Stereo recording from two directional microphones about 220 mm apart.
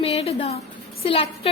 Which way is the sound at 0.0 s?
25° left (ahead or behind).